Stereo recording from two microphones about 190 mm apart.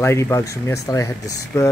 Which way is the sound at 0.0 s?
15° left (ahead or behind).